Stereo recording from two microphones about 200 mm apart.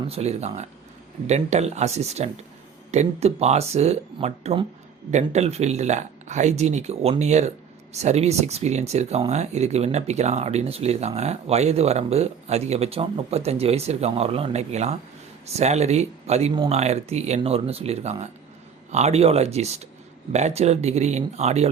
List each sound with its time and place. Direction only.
0.1 s speech: 30° right (ahead or behind)